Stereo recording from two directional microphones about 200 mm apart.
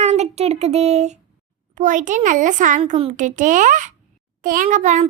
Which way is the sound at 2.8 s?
30° right (ahead or behind).